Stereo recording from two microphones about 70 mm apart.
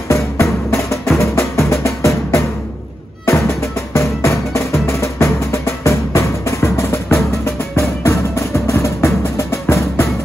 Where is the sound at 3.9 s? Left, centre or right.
Left.